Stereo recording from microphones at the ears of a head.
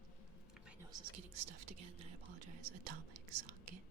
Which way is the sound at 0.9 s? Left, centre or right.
Right.